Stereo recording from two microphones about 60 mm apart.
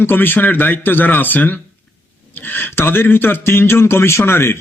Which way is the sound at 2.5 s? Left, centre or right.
Left.